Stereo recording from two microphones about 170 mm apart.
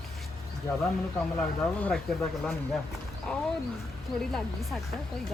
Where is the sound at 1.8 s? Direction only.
10° left (ahead or behind).